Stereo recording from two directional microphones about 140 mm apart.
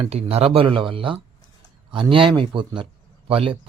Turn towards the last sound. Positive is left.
turn(degrees=-40)  # may be behind; listen again after turning